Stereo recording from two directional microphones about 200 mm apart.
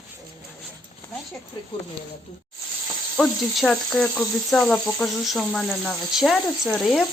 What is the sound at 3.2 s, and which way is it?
Speech, centre (ahead or behind).